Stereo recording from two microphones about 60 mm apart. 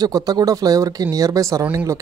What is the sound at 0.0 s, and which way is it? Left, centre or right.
Speech, right.